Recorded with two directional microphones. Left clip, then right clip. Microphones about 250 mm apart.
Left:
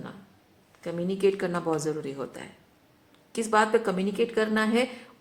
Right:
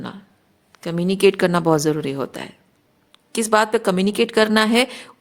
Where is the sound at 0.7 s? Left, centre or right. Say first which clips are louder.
Right 8 dB; right.